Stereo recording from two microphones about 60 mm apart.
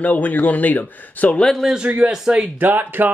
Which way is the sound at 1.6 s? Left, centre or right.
Centre.